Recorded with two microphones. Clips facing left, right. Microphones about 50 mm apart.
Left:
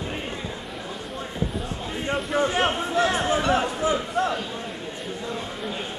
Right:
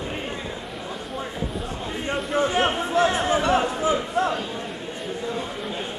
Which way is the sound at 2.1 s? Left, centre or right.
Centre.